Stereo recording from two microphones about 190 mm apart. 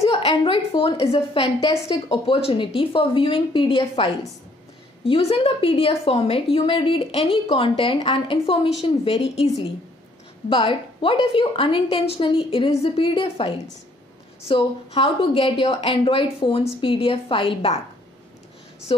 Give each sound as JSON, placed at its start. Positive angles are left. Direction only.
{"t": 0.1, "sound": "a woman's voice", "side_deg": 30}
{"t": 18.9, "sound": "a woman's voice", "side_deg": 25}